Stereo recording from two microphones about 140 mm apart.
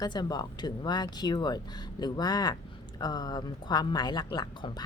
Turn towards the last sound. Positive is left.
turn(degrees=30)  # may be behind; listen again after turning